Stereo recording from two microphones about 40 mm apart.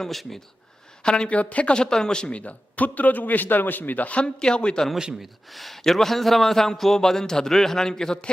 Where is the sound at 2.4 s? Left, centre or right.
Left.